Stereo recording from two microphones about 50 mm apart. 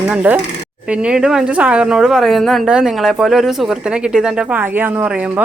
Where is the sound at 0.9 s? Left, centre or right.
Right.